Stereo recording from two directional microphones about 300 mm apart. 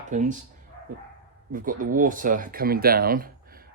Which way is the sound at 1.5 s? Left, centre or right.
Right.